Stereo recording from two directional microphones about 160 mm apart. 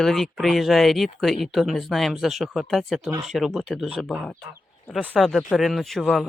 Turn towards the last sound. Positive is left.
turn(degrees=0)  # may be behind; listen again after turning